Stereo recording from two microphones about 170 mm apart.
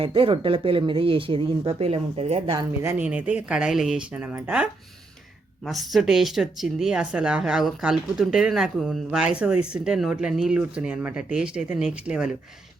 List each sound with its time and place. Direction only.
0.0 s speech: 30° right (ahead or behind)
2.8 s speech: 10° right (ahead or behind)